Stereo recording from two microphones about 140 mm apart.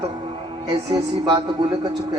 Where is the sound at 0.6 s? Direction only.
25° right (ahead or behind).